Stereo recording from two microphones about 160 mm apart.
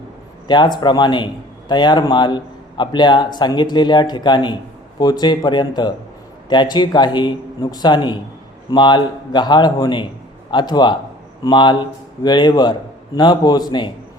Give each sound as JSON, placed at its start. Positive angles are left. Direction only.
{"t": 0.4, "sound": "a man's voice", "side_deg": 30}